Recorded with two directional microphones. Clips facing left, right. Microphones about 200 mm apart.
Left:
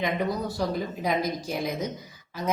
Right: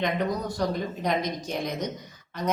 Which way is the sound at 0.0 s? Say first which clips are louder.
Even; 5° left (ahead or behind).